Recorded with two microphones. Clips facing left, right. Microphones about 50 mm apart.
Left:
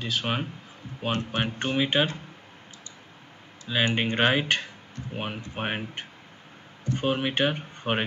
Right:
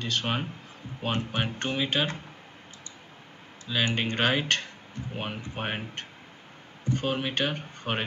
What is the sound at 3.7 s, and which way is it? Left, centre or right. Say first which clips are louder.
Speech: left 2 dB; centre.